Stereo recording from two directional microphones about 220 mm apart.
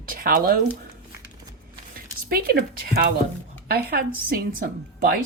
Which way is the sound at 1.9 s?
40° right (ahead or behind).